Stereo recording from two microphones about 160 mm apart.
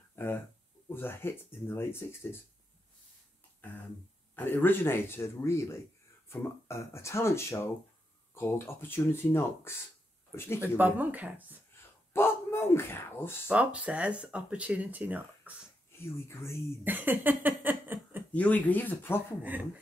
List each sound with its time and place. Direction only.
0.1 s a sound: 15° left (ahead or behind)
0.8 s speech: 15° left (ahead or behind)
4.4 s speech: 15° left (ahead or behind)
10.8 s speech: 10° right (ahead or behind)
12.1 s a sound: 15° left (ahead or behind)
13.5 s speech: 5° right (ahead or behind)
16.3 s speech: 15° left (ahead or behind)
16.8 s a sound: 10° right (ahead or behind)
18.3 s speech: 10° left (ahead or behind)